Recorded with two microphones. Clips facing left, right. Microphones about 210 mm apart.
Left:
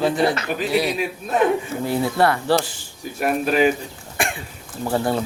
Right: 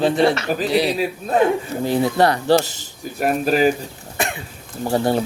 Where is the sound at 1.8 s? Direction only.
20° right (ahead or behind).